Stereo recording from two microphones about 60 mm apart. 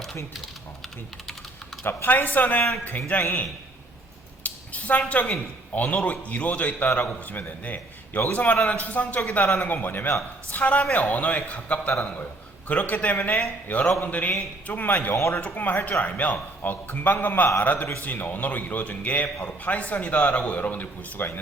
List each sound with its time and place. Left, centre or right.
1.8 s a man's voice: left
4.4 s a man's voice: left
15.1 s speech: left
15.4 s a man's voice: left